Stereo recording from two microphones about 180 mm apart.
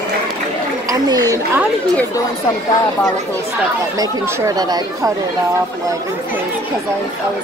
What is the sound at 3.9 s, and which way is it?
Speech, 20° right (ahead or behind).